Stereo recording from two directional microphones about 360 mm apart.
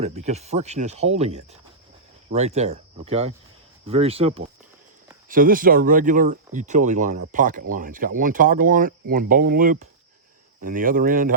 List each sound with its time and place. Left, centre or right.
0.0 s speech: centre